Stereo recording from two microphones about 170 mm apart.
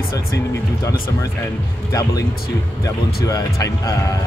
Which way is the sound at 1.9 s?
20° left (ahead or behind).